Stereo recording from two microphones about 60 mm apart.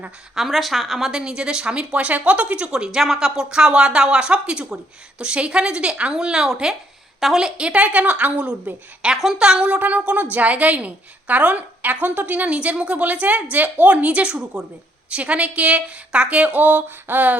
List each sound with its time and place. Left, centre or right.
0.3 s a woman's voice: centre; by 17.3 s right